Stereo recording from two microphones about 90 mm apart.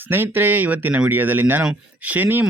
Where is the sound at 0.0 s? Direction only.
20° right (ahead or behind).